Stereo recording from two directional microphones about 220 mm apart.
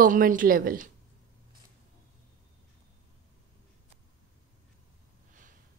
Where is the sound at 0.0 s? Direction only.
40° right (ahead or behind).